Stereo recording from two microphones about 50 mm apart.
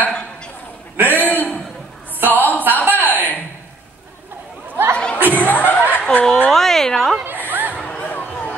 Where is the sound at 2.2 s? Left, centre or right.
Right.